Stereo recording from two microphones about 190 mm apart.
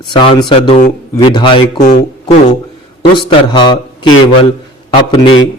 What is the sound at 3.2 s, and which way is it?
Speech, 25° left (ahead or behind).